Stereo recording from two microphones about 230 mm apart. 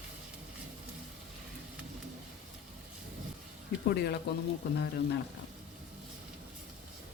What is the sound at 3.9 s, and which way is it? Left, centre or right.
Speech, left.